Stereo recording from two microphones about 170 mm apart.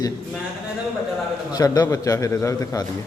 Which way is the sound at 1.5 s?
20° left (ahead or behind).